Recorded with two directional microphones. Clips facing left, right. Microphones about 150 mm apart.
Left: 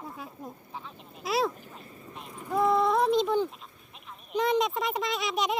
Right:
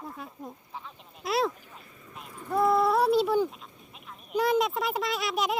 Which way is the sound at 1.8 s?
35° left (ahead or behind).